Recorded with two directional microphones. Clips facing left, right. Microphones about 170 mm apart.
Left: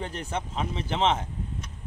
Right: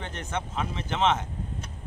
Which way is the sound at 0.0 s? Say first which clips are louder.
Left 1 dB; 35° left (ahead or behind).